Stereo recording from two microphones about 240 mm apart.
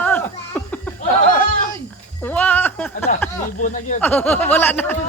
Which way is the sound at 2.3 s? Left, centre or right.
Centre.